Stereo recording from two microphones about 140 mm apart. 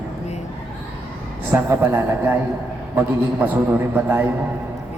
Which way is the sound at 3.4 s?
15° right (ahead or behind).